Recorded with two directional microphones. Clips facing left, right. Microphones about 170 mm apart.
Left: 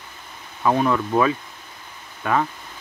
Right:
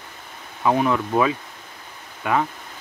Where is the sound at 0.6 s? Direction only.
15° right (ahead or behind).